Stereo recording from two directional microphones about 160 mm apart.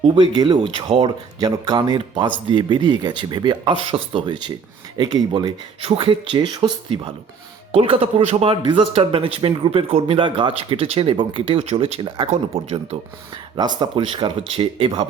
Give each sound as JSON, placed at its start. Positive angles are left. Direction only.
{"t": 0.0, "sound": "speech", "side_deg": -30}
{"t": 5.8, "sound": "speech", "side_deg": -35}
{"t": 12.3, "sound": "speech", "side_deg": -40}